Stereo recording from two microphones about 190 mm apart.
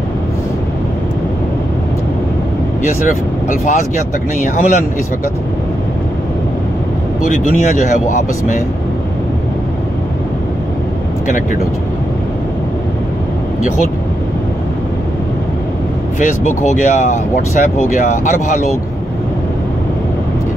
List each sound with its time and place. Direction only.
3.4 s speech: 40° left (ahead or behind)
7.2 s speech: 40° left (ahead or behind)
16.2 s speech: 40° left (ahead or behind)